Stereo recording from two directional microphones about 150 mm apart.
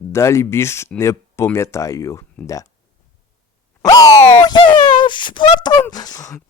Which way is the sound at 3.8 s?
25° left (ahead or behind).